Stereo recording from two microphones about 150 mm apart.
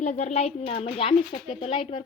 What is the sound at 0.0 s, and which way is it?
Speech, 50° left (ahead or behind).